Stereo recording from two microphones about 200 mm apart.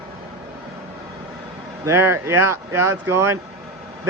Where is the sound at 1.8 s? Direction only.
15° right (ahead or behind).